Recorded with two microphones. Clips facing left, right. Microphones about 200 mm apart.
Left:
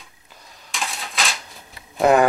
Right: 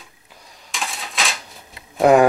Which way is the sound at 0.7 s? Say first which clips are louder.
Even; centre (ahead or behind).